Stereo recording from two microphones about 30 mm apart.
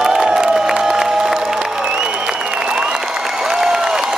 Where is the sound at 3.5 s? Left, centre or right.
Centre.